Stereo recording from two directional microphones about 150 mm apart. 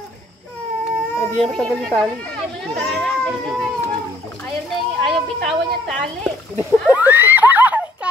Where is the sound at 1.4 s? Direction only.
5° left (ahead or behind).